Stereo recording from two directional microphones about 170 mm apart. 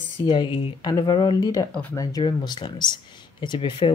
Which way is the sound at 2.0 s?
25° left (ahead or behind).